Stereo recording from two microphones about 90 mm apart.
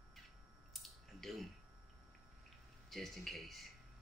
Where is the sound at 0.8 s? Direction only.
Centre (ahead or behind).